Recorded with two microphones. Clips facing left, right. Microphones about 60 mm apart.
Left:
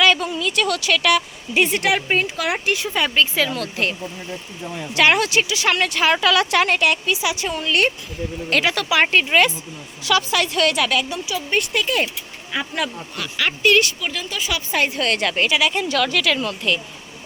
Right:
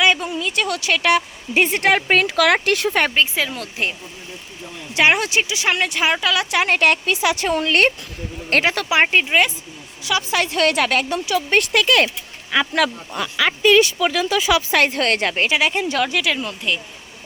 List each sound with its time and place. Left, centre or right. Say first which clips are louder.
0.0 s speech: left 1 dB; centre; by 2.0 s right
2.0 s speech: right 5 dB; right
3.2 s speech: left 1 dB; centre
4.9 s speech: even; right
6.7 s a woman's voice: right 2 dB; right
8.4 s a woman's voice: right 2 dB; right
9.2 s speech: left 1 dB; centre
10.2 s a woman's voice: right 1 dB; right
11.3 s speech: right 4 dB; right
14.7 s speech: right 3 dB; right
15.2 s speech: even; right; by 16.8 s centre